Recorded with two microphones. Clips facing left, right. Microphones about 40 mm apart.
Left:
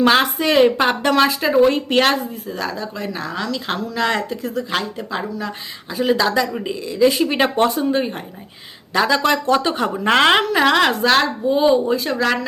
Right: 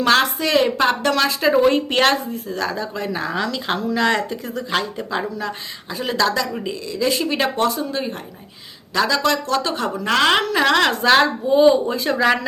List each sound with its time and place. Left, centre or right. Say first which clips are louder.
0.0 s speech: left 2 dB; centre
1.3 s speech: left 1 dB; centre; by 10.3 s left
10.3 s speech: left 2 dB; centre
12.1 s speech: right 2 dB; centre